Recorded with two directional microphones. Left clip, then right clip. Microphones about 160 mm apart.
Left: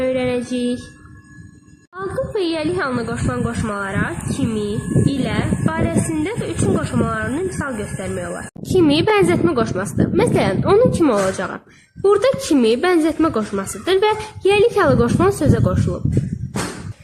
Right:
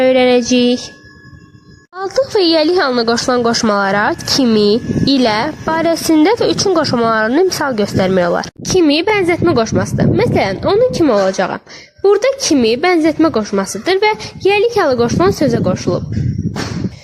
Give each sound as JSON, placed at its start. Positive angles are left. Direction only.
{"t": 0.0, "sound": "music", "side_deg": -55}
{"t": 2.0, "sound": "speech", "side_deg": -55}
{"t": 8.8, "sound": "a woman's voice", "side_deg": -30}